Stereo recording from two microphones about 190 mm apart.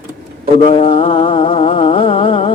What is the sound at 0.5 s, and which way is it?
Music, 30° left (ahead or behind).